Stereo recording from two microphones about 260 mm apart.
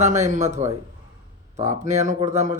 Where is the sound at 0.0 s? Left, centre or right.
Right.